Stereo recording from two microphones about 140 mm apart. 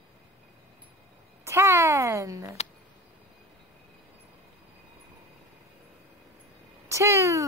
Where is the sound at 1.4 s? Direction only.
20° right (ahead or behind).